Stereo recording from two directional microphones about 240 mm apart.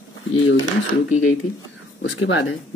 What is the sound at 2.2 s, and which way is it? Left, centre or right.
Speech, left.